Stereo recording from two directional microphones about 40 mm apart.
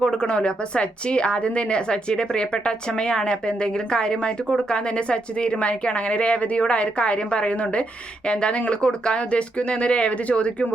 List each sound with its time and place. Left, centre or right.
0.0 s a woman's voice: left